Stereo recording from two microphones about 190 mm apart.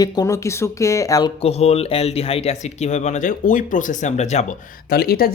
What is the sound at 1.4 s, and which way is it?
Speech, 35° left (ahead or behind).